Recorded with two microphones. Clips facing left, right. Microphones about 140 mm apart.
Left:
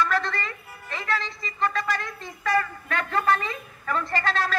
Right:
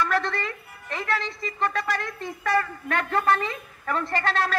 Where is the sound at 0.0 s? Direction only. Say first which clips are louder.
Even; 60° right (ahead or behind).